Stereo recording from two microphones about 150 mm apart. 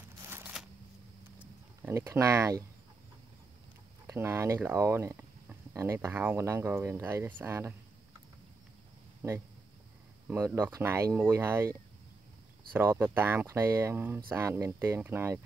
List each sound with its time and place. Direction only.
0.2 s a sound: 15° right (ahead or behind)
1.8 s speech: 20° right (ahead or behind)
4.1 s speech: 15° right (ahead or behind)
10.2 s speech: 15° right (ahead or behind)
12.7 s speech: 15° right (ahead or behind)